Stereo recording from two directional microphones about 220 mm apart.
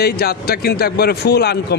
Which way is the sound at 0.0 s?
45° left (ahead or behind).